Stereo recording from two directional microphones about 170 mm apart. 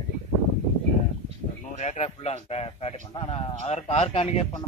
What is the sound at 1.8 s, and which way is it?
A man's voice, 40° left (ahead or behind).